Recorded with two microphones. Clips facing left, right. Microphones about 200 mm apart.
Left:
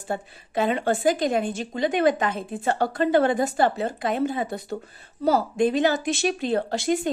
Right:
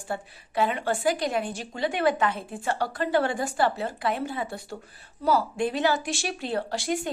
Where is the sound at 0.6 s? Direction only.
25° left (ahead or behind).